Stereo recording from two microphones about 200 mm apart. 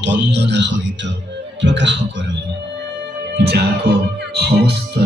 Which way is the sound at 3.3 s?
55° right (ahead or behind).